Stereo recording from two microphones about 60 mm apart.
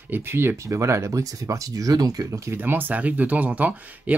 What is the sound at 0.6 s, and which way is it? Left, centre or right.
Speech, right.